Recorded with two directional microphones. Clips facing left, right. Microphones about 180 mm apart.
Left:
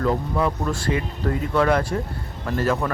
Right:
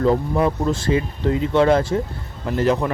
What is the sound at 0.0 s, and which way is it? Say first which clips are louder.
Speech: right 4 dB; 25° right (ahead or behind).